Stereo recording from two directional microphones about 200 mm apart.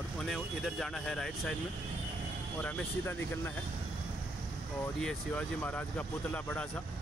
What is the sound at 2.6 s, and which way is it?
Speech, 5° left (ahead or behind).